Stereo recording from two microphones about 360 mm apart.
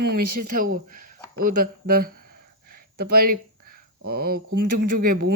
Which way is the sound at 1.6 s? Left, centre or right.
Right.